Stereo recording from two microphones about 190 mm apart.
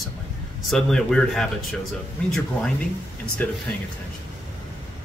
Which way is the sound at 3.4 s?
10° left (ahead or behind).